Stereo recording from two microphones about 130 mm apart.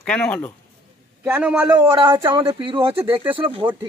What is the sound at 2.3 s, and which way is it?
Speech, 45° right (ahead or behind).